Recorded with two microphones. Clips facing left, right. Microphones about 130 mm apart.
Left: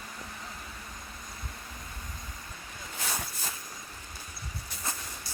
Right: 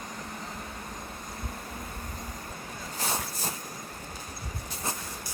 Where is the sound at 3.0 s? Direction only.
35° right (ahead or behind).